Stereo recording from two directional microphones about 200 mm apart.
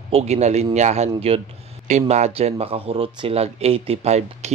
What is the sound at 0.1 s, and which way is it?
Speech, 35° right (ahead or behind).